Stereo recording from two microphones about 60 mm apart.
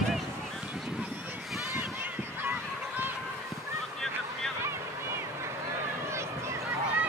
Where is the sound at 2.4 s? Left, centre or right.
Right.